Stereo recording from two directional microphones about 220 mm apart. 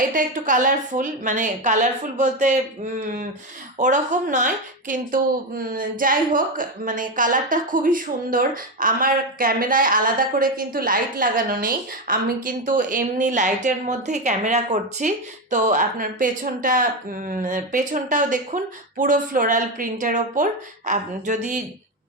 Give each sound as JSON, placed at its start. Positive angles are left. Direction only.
{"t": 0.1, "sound": "a woman's voice", "side_deg": -35}